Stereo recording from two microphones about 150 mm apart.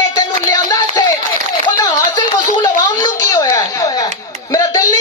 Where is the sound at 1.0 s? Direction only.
20° left (ahead or behind).